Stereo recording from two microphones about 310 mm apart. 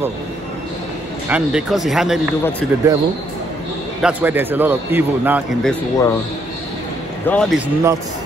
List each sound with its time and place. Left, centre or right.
1.3 s a man's voice: centre
4.0 s a man's voice: centre
7.2 s a man's voice: centre